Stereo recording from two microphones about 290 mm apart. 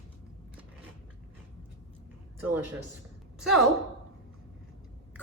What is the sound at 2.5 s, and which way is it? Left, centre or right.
A woman's voice, centre.